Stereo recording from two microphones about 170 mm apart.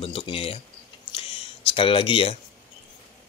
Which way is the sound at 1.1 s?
35° left (ahead or behind).